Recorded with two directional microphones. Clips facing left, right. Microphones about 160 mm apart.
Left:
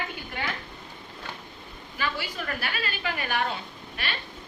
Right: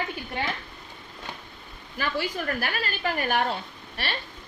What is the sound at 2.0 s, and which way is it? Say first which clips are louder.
A woman's voice: right 3 dB; 45° right (ahead or behind).